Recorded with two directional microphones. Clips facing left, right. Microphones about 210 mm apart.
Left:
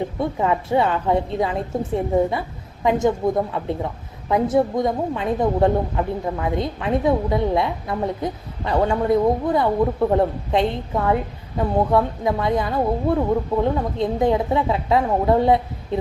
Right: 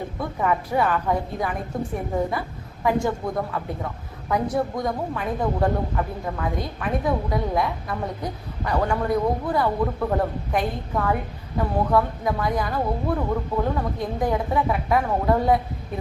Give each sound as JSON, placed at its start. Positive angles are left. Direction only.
{"t": 0.2, "sound": "speech", "side_deg": 25}